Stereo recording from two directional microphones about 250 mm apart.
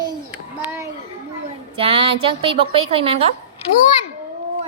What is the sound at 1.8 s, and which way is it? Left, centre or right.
Music, right.